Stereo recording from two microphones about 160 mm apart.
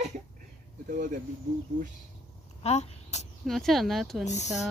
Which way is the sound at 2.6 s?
45° left (ahead or behind).